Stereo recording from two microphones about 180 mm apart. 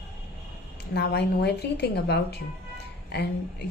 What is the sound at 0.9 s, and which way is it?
A woman's voice, 65° left (ahead or behind).